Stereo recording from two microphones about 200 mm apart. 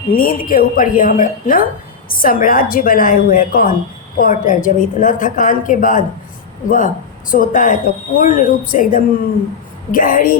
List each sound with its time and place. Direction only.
0.1 s a woman's voice: 45° left (ahead or behind)